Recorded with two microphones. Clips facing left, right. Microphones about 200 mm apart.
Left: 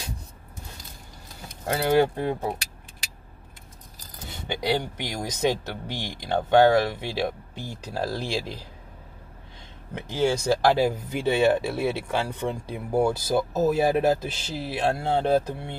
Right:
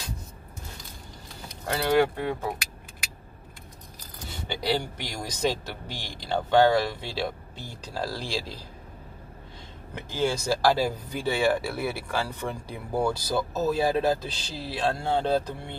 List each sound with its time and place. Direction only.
1.7 s speech: 20° left (ahead or behind)
4.5 s speech: 20° left (ahead or behind)
10.0 s speech: 20° left (ahead or behind)